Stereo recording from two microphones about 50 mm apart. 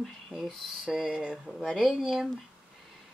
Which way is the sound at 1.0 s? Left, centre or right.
Centre.